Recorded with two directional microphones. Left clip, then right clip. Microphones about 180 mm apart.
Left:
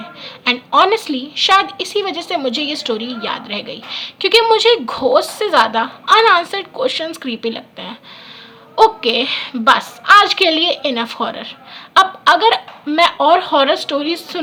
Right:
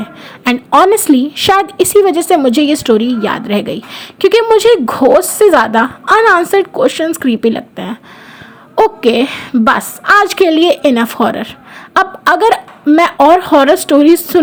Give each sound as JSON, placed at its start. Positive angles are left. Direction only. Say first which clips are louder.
{"t": 0.0, "sound": "a woman's voice", "louder": "right 2 dB", "side_deg": -40}